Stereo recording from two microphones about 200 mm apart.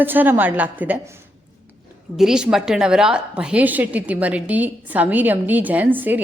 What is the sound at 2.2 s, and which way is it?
A woman's voice, 5° right (ahead or behind).